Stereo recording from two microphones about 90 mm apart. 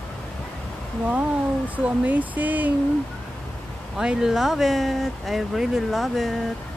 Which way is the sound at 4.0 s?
5° right (ahead or behind).